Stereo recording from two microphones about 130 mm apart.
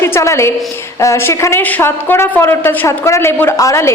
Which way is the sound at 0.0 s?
20° left (ahead or behind).